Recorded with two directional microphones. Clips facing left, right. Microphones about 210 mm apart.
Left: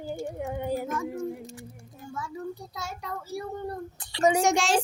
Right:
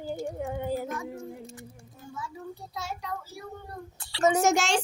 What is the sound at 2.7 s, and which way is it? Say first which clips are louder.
Speech: right 1 dB; 45° left (ahead or behind).